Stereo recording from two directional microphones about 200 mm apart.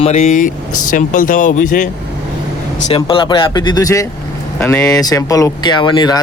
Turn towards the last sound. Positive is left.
turn(degrees=20)  # may be behind; listen again after turning